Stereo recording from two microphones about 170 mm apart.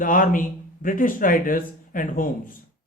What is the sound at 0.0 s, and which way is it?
Speech, 55° left (ahead or behind).